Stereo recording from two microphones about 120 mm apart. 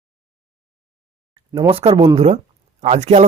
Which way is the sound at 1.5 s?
55° right (ahead or behind).